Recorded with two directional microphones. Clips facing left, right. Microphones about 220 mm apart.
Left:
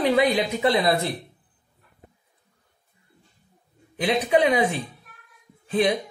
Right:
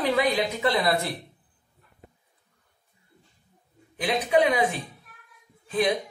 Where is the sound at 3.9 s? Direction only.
25° left (ahead or behind).